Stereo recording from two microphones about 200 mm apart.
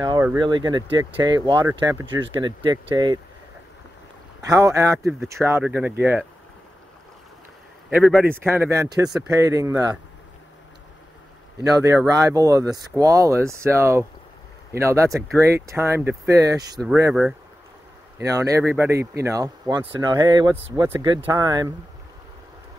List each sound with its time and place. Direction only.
0.0 s speech: 20° right (ahead or behind)
4.4 s speech: 15° right (ahead or behind)
7.9 s speech: 5° right (ahead or behind)
11.6 s speech: 15° right (ahead or behind)
16.8 s speech: 5° right (ahead or behind)
18.2 s speech: 15° right (ahead or behind)